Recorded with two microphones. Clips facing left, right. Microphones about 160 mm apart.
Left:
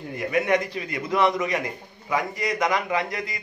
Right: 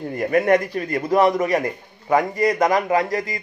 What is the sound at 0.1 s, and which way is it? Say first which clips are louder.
A man's voice: right 5 dB; 50° right (ahead or behind).